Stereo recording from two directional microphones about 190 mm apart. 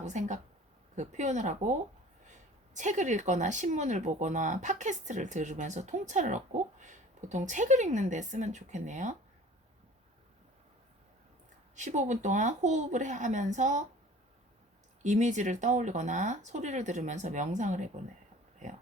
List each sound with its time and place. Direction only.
0.0 s speech: 40° right (ahead or behind)
11.7 s speech: 40° right (ahead or behind)
15.0 s speech: 40° right (ahead or behind)